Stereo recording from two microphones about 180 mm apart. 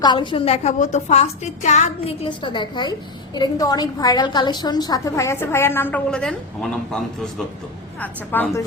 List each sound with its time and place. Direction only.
0.0 s a woman's voice: 25° left (ahead or behind); by 2.1 s 40° left (ahead or behind)
2.4 s a woman's voice: 25° left (ahead or behind)